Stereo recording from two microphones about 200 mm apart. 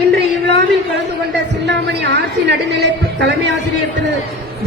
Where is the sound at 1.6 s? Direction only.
60° right (ahead or behind).